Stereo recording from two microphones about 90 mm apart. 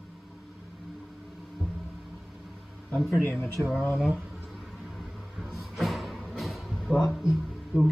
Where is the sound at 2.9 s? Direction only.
Centre (ahead or behind).